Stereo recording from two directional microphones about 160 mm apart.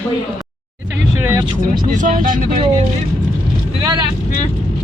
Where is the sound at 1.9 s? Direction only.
55° right (ahead or behind).